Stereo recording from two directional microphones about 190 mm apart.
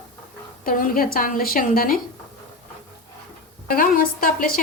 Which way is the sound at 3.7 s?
50° left (ahead or behind).